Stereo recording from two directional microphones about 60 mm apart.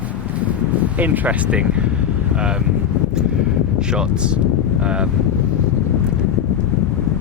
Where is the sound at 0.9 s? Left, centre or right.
Right.